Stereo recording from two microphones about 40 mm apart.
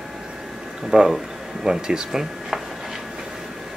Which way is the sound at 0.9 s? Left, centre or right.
Centre.